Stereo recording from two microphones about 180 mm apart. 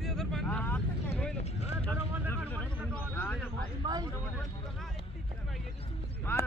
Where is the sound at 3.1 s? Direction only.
10° left (ahead or behind).